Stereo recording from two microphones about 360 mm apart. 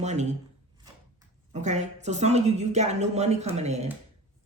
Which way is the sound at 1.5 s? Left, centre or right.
Centre.